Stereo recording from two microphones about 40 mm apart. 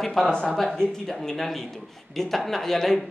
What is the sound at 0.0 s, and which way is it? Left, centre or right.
Speech, centre.